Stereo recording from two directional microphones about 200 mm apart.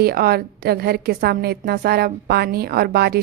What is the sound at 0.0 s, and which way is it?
A woman's voice, 50° right (ahead or behind).